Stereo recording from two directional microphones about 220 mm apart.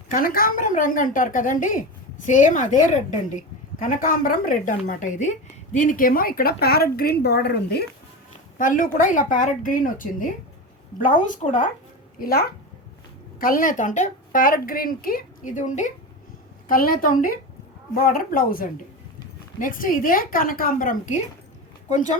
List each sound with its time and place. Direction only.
0.1 s a woman's voice: 40° left (ahead or behind)
8.5 s a woman's voice: 35° left (ahead or behind)